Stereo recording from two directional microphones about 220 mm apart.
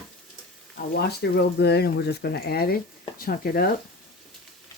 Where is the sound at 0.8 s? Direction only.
45° left (ahead or behind).